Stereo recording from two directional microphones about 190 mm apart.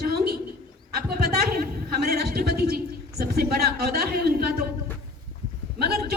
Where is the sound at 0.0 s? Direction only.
55° right (ahead or behind).